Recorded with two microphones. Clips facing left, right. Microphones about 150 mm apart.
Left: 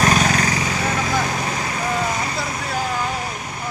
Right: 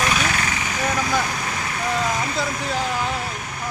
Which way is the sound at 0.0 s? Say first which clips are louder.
Left 5 dB; 40° left (ahead or behind).